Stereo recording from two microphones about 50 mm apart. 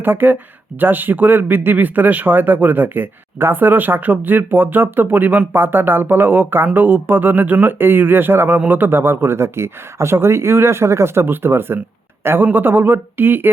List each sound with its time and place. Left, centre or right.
0.0 s speech: right
8.4 s speech: right